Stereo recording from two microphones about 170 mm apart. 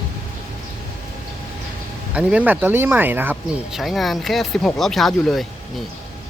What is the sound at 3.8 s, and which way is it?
Speech, centre (ahead or behind).